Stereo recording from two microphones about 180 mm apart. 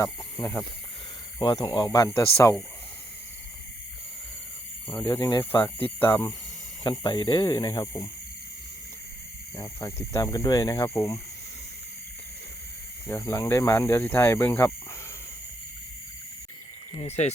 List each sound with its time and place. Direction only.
0.0 s speech: 20° left (ahead or behind)
5.0 s speech: 20° left (ahead or behind)
6.8 s speech: 25° left (ahead or behind)
9.6 s speech: 15° left (ahead or behind)
13.1 s speech: 15° left (ahead or behind)
17.0 s speech: 35° left (ahead or behind)